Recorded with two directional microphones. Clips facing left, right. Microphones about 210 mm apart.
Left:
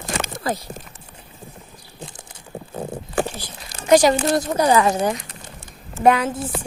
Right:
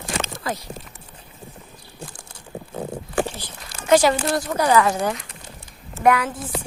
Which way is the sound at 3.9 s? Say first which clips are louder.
Left 2 dB; 15° left (ahead or behind).